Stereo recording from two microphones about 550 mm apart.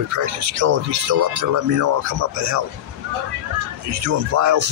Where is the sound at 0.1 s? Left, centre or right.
Right.